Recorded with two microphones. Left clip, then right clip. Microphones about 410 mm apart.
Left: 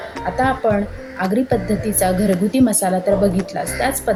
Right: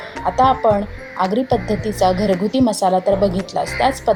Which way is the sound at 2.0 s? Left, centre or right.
Left.